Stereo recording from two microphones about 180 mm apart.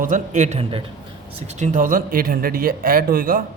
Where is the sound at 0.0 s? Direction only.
45° right (ahead or behind).